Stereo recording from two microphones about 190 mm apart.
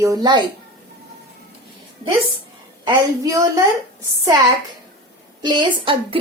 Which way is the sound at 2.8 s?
20° right (ahead or behind).